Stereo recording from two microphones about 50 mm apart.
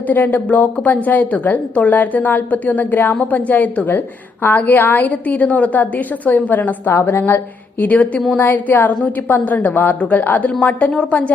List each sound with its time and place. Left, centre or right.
0.1 s a woman's voice: left
7.0 s a woman's voice: left
7.8 s a woman's voice: left